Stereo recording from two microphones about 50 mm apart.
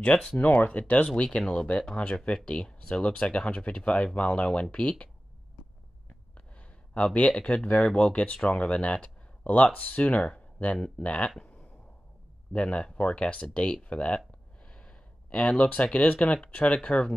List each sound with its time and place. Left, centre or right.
0.4 s speech: left; by 4.1 s centre
4.1 s speech: left
7.3 s speech: left
12.5 s speech: left